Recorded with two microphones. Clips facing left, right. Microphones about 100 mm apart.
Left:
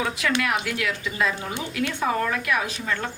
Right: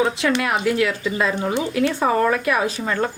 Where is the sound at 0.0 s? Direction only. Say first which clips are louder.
Right 5 dB; 25° right (ahead or behind).